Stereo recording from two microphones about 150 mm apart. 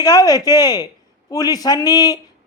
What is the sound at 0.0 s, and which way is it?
Speech, 25° left (ahead or behind).